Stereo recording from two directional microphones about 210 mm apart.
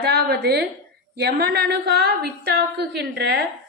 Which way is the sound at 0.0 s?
50° right (ahead or behind).